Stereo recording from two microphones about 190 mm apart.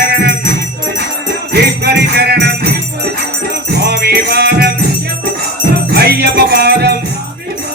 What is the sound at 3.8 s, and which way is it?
Music, 60° right (ahead or behind).